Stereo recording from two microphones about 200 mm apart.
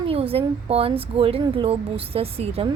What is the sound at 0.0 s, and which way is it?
A woman's voice, 30° right (ahead or behind).